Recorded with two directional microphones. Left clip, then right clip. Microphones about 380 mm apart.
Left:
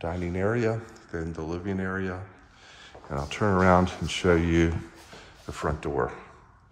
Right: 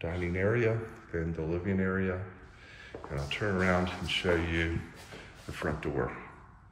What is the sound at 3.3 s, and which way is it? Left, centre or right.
A man's voice, centre.